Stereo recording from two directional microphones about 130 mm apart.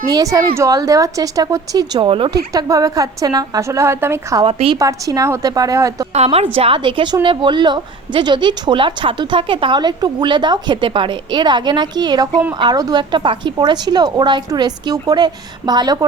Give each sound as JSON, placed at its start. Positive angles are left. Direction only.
{"t": 0.1, "sound": "a woman's voice", "side_deg": -25}
{"t": 2.0, "sound": "a woman's voice", "side_deg": -40}
{"t": 2.3, "sound": "a woman's voice", "side_deg": -30}
{"t": 4.4, "sound": "a woman's voice", "side_deg": -45}
{"t": 4.8, "sound": "a woman's voice", "side_deg": -25}
{"t": 6.1, "sound": "a woman's voice", "side_deg": -50}